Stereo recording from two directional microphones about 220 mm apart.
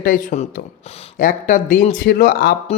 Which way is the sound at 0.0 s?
35° left (ahead or behind).